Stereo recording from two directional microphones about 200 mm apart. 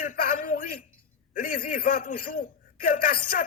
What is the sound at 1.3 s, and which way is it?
A man's voice, 45° left (ahead or behind).